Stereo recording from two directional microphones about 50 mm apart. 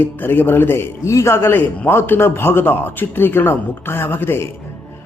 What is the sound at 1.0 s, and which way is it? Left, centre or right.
Speech, left.